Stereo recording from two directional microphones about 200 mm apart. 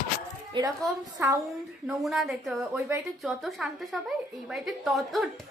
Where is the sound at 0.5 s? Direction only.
25° right (ahead or behind).